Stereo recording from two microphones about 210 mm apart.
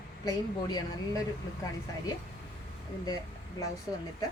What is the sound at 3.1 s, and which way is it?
Speech, 15° left (ahead or behind).